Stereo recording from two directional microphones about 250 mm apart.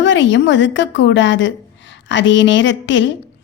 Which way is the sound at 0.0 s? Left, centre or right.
Left.